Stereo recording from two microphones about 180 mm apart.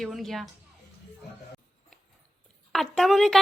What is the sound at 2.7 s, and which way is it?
Speech, centre (ahead or behind).